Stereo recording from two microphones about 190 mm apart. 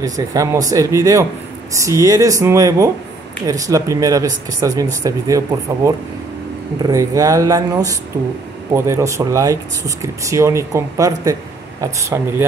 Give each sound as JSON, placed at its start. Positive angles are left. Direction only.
{"t": 0.0, "sound": "speech", "side_deg": -20}
{"t": 6.8, "sound": "speech", "side_deg": -15}